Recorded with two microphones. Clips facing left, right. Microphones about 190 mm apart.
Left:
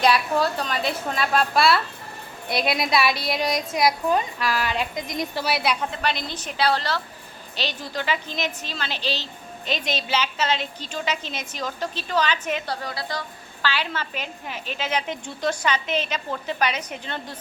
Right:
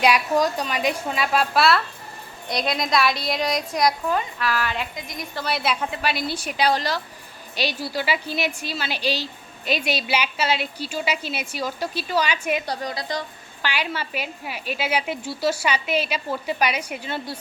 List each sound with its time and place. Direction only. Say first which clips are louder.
0.0 s a woman's voice: right 1 dB; 15° right (ahead or behind); by 3.9 s centre (ahead or behind)
4.1 s a woman's voice: left 1 dB; 15° left (ahead or behind); by 17.3 s 10° right (ahead or behind)